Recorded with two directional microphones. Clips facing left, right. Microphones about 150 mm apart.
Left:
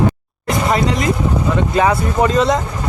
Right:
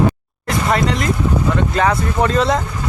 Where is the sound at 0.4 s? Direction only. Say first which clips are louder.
Left 1 dB; centre (ahead or behind).